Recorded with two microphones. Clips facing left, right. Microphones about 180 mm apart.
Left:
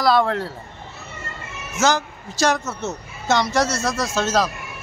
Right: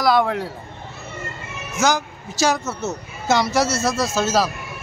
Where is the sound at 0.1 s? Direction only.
10° right (ahead or behind).